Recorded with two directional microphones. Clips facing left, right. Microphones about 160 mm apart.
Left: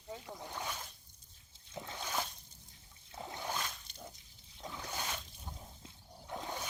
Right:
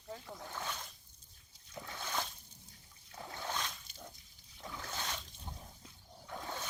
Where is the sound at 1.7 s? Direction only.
20° left (ahead or behind).